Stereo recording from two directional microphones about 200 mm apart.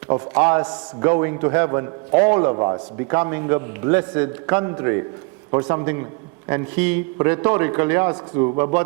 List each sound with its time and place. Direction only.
0.1 s a man's voice: 15° right (ahead or behind)
3.1 s a man's voice: 15° right (ahead or behind)